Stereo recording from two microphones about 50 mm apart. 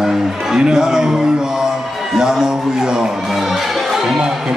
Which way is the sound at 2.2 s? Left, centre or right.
Centre.